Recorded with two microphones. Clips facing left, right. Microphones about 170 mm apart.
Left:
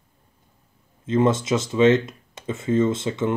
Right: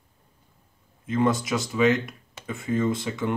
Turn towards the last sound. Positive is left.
turn(degrees=25)  # may be behind; listen again after turning